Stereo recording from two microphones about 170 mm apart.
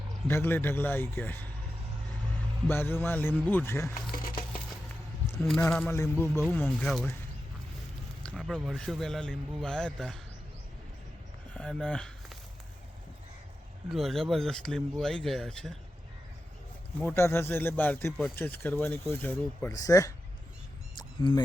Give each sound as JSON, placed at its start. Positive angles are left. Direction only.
{"t": 0.3, "sound": "speech", "side_deg": 10}
{"t": 2.6, "sound": "speech", "side_deg": 15}
{"t": 5.4, "sound": "speech", "side_deg": 5}
{"t": 8.4, "sound": "speech", "side_deg": 0}
{"t": 11.5, "sound": "speech", "side_deg": 5}
{"t": 13.9, "sound": "speech", "side_deg": 0}
{"t": 17.0, "sound": "speech", "side_deg": 10}
{"t": 20.9, "sound": "single-lens reflex camera", "side_deg": 30}